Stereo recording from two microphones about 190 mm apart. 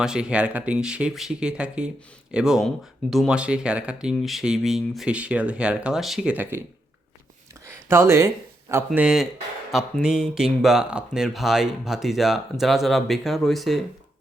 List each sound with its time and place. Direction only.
0.0 s speech: 5° right (ahead or behind)
7.9 s speech: 15° right (ahead or behind)
8.9 s speech: centre (ahead or behind)